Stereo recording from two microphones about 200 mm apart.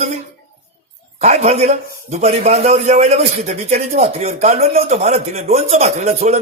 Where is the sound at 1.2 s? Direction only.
35° right (ahead or behind).